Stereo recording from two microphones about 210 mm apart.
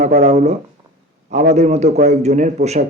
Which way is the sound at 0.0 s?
35° right (ahead or behind).